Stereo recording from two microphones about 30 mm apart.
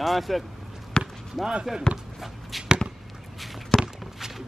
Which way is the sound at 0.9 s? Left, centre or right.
Left.